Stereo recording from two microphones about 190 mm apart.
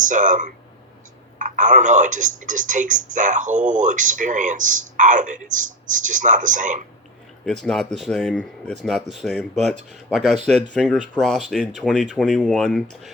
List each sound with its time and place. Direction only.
0.0 s speech: 40° right (ahead or behind)
7.4 s speech: centre (ahead or behind)